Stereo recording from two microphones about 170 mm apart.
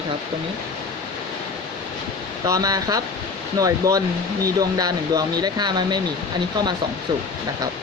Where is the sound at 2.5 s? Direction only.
20° right (ahead or behind).